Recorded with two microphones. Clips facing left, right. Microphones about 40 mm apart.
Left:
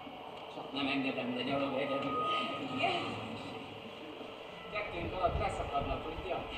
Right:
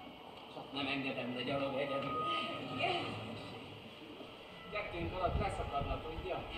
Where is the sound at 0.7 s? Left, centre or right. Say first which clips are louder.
Left 4 dB; left.